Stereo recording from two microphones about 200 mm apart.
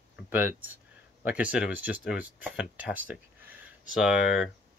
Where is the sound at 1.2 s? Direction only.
5° right (ahead or behind).